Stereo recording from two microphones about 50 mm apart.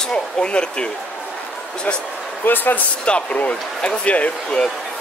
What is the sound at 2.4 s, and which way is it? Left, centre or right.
Speech, left.